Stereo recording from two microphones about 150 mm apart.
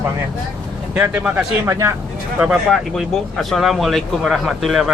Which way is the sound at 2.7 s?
Centre (ahead or behind).